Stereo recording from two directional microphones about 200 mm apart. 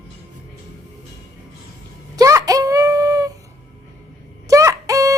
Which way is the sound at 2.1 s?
15° right (ahead or behind).